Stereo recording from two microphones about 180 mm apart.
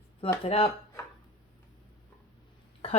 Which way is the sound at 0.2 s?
30° left (ahead or behind).